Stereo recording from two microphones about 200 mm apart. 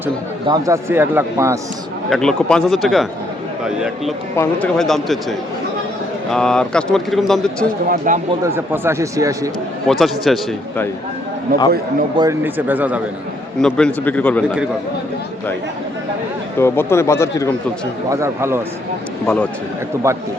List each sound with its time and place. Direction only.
0.4 s a man's voice: 20° right (ahead or behind)
2.0 s speech: centre (ahead or behind)
6.3 s speech: 5° left (ahead or behind)
7.9 s speech: 40° right (ahead or behind)
8.4 s a man's voice: 10° right (ahead or behind)
9.8 s speech: centre (ahead or behind)
12.1 s a man's voice: 15° right (ahead or behind)
13.6 s speech: 5° left (ahead or behind)
16.6 s speech: 10° left (ahead or behind)
18.1 s a man's voice: 15° right (ahead or behind)
19.2 s speech: 5° left (ahead or behind)
20.1 s a man's voice: 15° right (ahead or behind)